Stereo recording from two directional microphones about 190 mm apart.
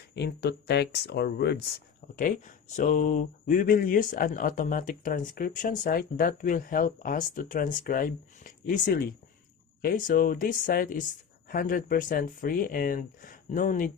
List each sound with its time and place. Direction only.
0.2 s speech: 60° left (ahead or behind)
2.1 s speech: 45° left (ahead or behind)